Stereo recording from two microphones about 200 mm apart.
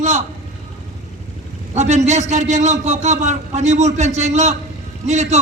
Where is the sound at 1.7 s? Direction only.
35° right (ahead or behind).